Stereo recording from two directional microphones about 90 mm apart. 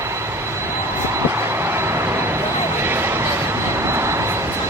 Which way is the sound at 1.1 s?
30° right (ahead or behind).